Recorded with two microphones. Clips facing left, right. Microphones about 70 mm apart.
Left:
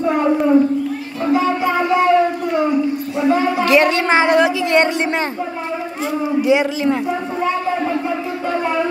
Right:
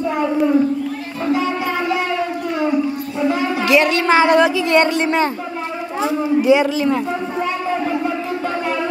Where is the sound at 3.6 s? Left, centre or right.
Left.